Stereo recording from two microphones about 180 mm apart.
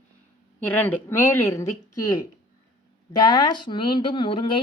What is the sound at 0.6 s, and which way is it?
A woman's voice, 10° left (ahead or behind).